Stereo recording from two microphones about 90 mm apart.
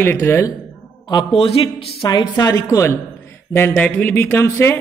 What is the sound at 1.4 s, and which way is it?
Speech, 90° left.